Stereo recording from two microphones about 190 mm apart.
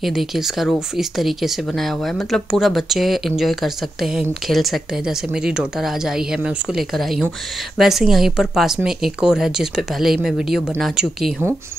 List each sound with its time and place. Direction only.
0.0 s speech: centre (ahead or behind)